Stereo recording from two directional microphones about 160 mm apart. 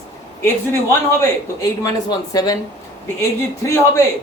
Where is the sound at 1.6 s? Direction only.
25° left (ahead or behind).